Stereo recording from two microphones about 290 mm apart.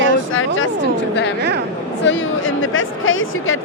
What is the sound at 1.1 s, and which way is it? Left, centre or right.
Speech, left.